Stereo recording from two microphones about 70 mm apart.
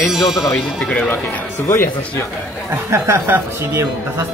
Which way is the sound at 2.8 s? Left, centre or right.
Right.